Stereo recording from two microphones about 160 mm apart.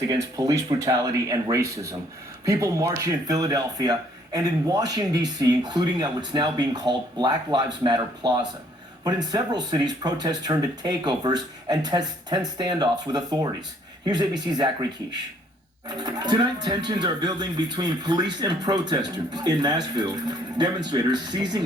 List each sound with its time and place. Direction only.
0.1 s speech: 20° right (ahead or behind)